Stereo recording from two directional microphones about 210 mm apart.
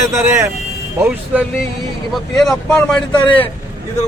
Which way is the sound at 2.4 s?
5° left (ahead or behind).